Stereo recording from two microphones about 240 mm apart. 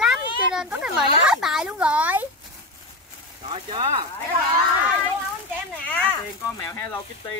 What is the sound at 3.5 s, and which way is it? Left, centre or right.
Speech, right.